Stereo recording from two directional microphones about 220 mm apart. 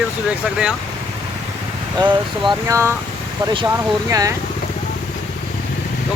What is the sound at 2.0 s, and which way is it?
Speech, 20° right (ahead or behind).